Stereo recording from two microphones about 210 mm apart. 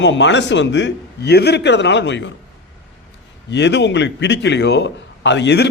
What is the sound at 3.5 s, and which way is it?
A man's voice, 55° left (ahead or behind).